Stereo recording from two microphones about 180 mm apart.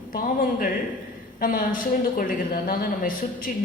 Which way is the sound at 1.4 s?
50° left (ahead or behind).